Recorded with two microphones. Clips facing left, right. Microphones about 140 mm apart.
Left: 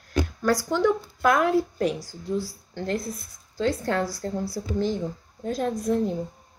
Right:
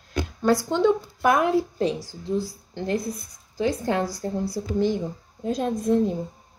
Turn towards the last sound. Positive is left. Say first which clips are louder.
# right 3 dB
turn(degrees=-20)  # may be behind; listen again after turning